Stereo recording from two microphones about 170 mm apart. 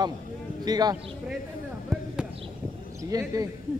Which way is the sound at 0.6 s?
25° right (ahead or behind).